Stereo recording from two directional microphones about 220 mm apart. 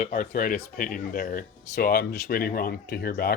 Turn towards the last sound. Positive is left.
turn(degrees=45)  # may be behind; listen again after turning